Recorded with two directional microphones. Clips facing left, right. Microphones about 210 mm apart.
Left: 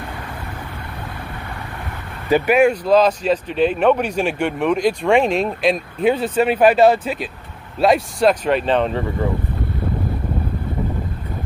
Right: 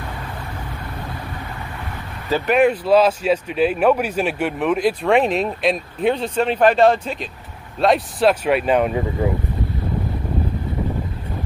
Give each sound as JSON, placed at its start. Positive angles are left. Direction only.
{"t": 2.2, "sound": "speech", "side_deg": 15}
{"t": 2.5, "sound": "speech", "side_deg": -5}